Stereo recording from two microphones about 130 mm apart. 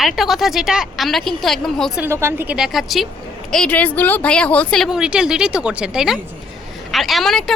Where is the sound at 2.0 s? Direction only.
20° right (ahead or behind).